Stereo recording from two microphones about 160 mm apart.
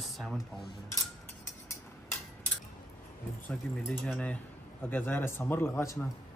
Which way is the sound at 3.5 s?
5° left (ahead or behind).